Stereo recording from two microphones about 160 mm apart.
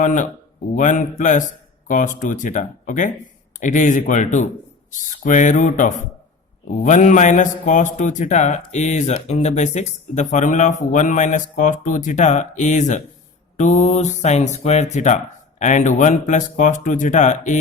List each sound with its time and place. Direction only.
0.0 s speech: 55° left (ahead or behind)